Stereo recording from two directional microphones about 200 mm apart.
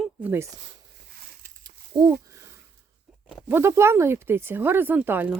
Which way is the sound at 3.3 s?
10° right (ahead or behind).